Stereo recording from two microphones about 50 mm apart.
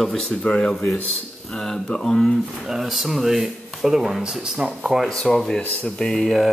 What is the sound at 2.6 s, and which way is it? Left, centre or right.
Speech, centre.